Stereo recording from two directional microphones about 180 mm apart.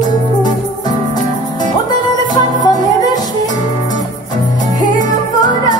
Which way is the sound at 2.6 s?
20° left (ahead or behind).